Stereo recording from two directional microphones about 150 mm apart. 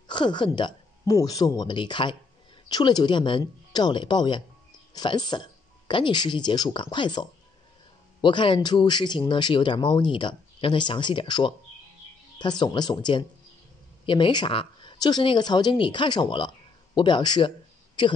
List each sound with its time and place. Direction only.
0.1 s a woman's voice: 30° left (ahead or behind)